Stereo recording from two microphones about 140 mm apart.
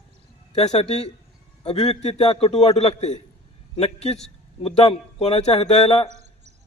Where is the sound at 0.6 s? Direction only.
50° left (ahead or behind).